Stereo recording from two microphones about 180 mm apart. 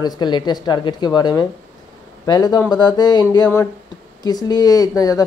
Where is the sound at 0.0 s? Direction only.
25° left (ahead or behind).